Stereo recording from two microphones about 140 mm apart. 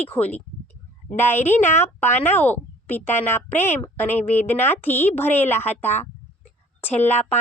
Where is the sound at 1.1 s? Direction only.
15° left (ahead or behind).